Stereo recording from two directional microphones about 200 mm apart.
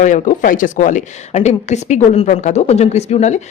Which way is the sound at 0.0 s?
40° left (ahead or behind).